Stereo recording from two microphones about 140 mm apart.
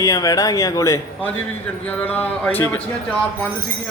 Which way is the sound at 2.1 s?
10° left (ahead or behind).